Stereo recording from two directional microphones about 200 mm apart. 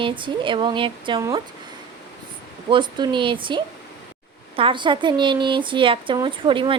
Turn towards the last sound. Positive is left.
turn(degrees=-25)  # may be behind; listen again after turning